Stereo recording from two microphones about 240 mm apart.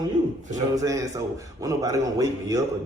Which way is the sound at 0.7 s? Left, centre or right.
Centre.